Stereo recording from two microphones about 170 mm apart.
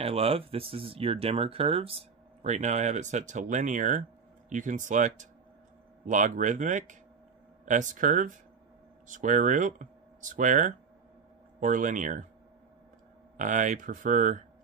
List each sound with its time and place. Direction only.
0.0 s speech: 35° right (ahead or behind)
13.4 s speech: 50° right (ahead or behind)